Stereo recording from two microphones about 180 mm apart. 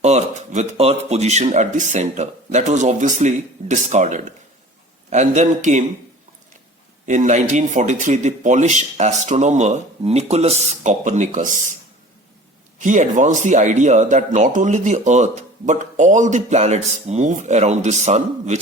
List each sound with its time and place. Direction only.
0.0 s speech: 40° right (ahead or behind)
7.0 s speech: 40° right (ahead or behind)
12.8 s speech: 45° right (ahead or behind)